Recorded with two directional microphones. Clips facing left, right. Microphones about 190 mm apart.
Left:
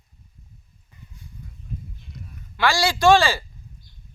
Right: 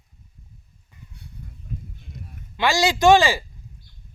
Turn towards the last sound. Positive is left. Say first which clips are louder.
# right 1 dB
turn(degrees=-15)  # may be behind; listen again after turning